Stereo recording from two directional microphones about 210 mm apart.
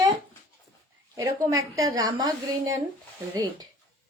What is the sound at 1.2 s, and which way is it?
Speech, 15° right (ahead or behind).